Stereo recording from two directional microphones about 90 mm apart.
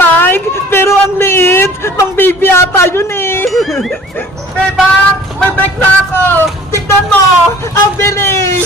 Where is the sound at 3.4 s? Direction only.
Centre (ahead or behind).